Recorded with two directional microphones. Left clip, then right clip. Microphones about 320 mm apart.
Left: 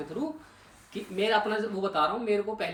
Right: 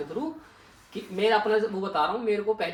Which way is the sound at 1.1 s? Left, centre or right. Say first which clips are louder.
Right 4 dB; centre.